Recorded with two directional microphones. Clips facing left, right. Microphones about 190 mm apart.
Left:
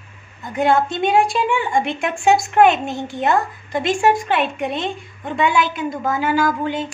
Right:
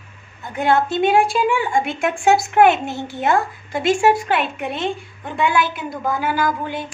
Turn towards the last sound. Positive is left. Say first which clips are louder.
# left 3 dB
turn(degrees=-5)  # may be behind; listen again after turning